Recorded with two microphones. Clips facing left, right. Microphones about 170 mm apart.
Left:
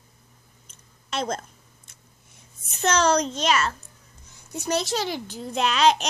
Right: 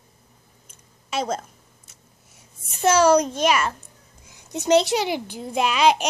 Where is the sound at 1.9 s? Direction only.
5° right (ahead or behind).